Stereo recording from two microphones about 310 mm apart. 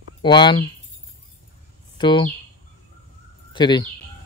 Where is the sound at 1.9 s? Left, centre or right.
Centre.